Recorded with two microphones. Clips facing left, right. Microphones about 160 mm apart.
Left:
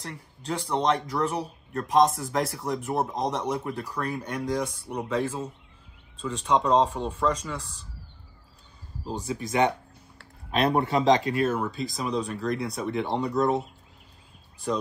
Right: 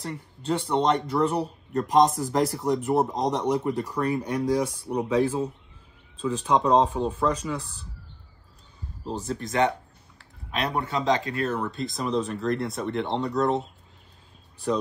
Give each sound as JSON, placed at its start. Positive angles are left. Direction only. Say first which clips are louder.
{"t": 0.0, "sound": "speech", "louder": "right 5 dB", "side_deg": 0}
{"t": 9.0, "sound": "speech", "louder": "right 1 dB", "side_deg": 0}
{"t": 9.5, "sound": "speech", "louder": "even", "side_deg": 15}
{"t": 10.9, "sound": "speech", "louder": "left 3 dB", "side_deg": 25}
{"t": 11.3, "sound": "speech", "louder": "left 2 dB", "side_deg": 5}